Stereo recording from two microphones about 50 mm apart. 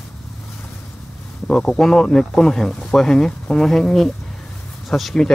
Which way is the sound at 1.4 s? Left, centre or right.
Centre.